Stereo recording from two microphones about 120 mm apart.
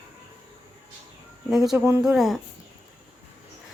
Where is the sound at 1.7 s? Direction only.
20° right (ahead or behind).